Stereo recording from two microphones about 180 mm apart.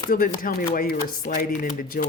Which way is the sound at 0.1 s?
50° left (ahead or behind).